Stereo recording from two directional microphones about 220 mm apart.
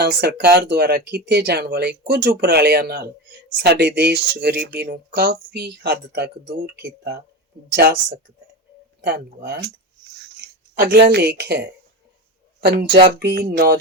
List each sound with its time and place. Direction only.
0.0 s speech: 45° right (ahead or behind)
10.8 s speech: 45° right (ahead or behind)